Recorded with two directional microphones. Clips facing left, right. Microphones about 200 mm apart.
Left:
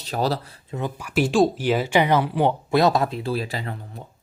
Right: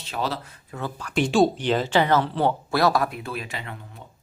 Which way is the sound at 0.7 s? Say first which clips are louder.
Left 2 dB; 15° left (ahead or behind).